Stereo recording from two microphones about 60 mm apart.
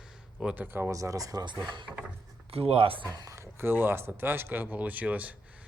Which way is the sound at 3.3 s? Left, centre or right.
Right.